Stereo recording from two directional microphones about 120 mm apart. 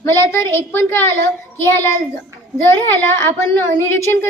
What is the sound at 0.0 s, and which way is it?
A child's voice, 25° left (ahead or behind).